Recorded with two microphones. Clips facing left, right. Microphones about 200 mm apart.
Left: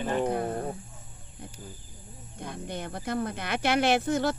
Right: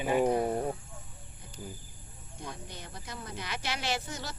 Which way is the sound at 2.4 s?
55° left (ahead or behind).